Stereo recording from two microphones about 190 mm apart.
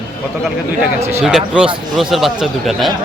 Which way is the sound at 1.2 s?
5° right (ahead or behind).